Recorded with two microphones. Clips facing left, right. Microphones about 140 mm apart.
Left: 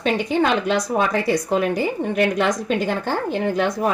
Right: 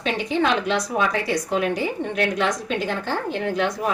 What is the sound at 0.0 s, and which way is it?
A woman's voice, 50° left (ahead or behind).